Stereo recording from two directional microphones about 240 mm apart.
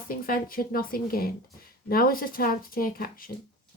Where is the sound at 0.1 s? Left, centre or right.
Left.